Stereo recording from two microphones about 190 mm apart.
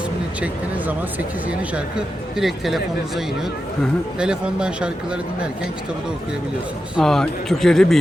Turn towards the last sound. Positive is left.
turn(degrees=0)  # may be behind; listen again after turning